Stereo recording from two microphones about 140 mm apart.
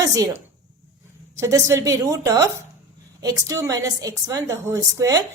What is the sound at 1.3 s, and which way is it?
A woman's voice, 20° right (ahead or behind).